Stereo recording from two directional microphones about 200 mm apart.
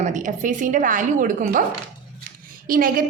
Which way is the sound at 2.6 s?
45° right (ahead or behind).